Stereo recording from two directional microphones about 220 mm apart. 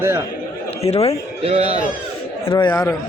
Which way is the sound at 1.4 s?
30° right (ahead or behind).